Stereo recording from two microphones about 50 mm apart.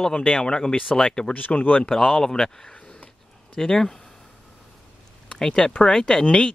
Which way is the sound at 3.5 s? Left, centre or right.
Centre.